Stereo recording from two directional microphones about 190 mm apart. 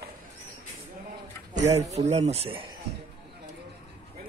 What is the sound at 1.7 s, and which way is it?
Speech, 35° right (ahead or behind).